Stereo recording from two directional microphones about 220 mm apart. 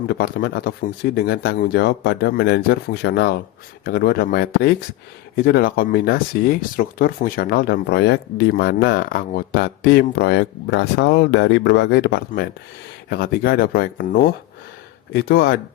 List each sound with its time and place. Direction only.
0.1 s speech: 45° left (ahead or behind)